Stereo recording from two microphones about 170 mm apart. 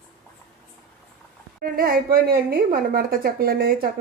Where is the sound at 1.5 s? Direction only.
55° right (ahead or behind).